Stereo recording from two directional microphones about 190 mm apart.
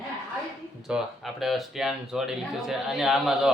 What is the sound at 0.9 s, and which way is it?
Speech, centre (ahead or behind).